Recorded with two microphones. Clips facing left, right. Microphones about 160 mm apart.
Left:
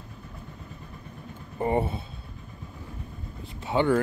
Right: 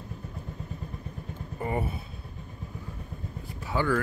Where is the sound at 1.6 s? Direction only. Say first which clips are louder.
Left 5 dB; 30° left (ahead or behind).